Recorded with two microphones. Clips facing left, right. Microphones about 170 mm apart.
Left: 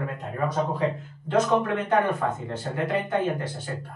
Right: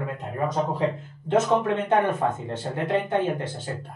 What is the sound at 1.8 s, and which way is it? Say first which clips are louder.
Speech: right 1 dB; 25° right (ahead or behind).